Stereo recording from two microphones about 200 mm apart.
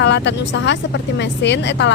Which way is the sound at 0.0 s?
60° left (ahead or behind).